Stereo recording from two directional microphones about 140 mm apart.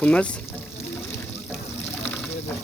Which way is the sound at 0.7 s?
20° left (ahead or behind).